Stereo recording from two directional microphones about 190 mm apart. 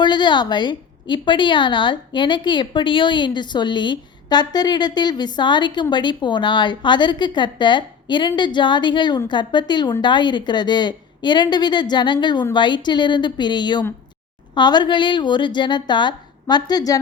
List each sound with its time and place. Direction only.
0.0 s a woman's voice: 25° left (ahead or behind)